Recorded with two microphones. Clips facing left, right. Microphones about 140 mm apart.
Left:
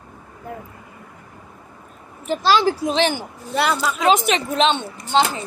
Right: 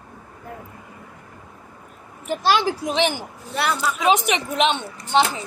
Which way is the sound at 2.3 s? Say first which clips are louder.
Left 3 dB; 10° right (ahead or behind).